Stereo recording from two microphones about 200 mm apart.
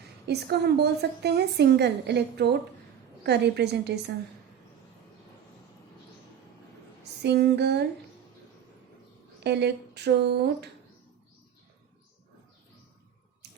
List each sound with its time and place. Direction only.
0.3 s a woman's voice: 55° right (ahead or behind)
7.0 s a sound: 55° right (ahead or behind)
9.4 s a woman's voice: 55° right (ahead or behind)